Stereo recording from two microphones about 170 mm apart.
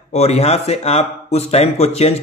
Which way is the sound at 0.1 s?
40° left (ahead or behind).